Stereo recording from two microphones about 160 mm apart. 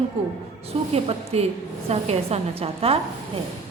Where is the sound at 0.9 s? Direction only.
40° right (ahead or behind).